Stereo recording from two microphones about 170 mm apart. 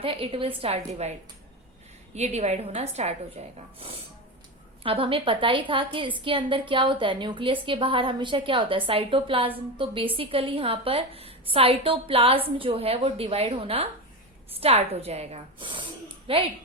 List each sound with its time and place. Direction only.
0.0 s a woman's voice: 30° right (ahead or behind)
2.1 s a woman's voice: 40° right (ahead or behind)